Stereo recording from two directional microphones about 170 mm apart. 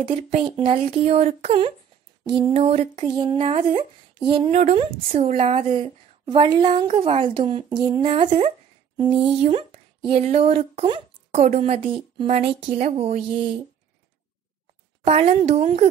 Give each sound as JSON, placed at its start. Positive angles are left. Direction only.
{"t": 0.0, "sound": "speech", "side_deg": -35}
{"t": 15.0, "sound": "speech", "side_deg": -35}